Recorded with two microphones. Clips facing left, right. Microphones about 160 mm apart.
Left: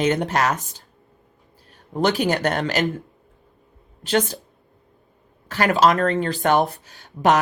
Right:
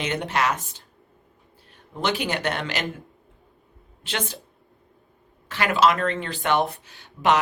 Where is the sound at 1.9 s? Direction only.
40° left (ahead or behind).